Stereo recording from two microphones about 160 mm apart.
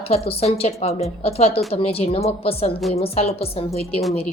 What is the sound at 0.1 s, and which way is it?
Speech, 40° left (ahead or behind).